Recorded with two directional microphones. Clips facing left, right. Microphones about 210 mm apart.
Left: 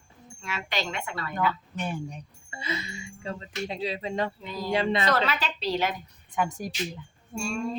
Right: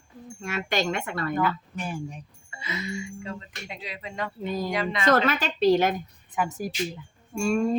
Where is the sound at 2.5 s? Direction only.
30° left (ahead or behind).